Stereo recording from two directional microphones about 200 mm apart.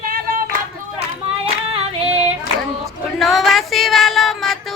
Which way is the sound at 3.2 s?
Centre (ahead or behind).